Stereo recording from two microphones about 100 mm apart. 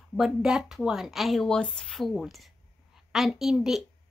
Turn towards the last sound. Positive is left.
turn(degrees=0)  # may be behind; listen again after turning